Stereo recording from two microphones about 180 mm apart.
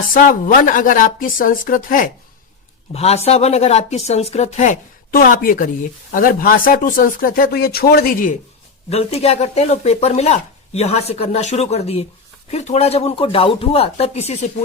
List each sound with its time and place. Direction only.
0.0 s speech: 50° left (ahead or behind)
2.9 s speech: 35° left (ahead or behind)
8.9 s speech: 35° left (ahead or behind)